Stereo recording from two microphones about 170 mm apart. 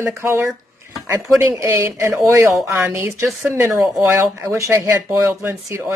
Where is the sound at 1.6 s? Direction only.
15° right (ahead or behind).